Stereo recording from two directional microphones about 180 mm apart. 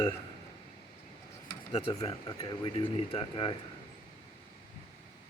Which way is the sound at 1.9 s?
20° left (ahead or behind).